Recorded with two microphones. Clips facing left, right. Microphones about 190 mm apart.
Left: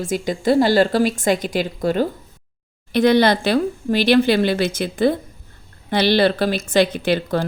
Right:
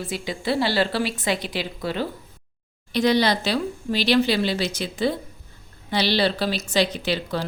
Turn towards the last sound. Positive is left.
turn(degrees=50)  # may be behind; listen again after turning